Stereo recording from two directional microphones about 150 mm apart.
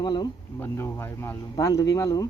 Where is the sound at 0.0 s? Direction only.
30° left (ahead or behind).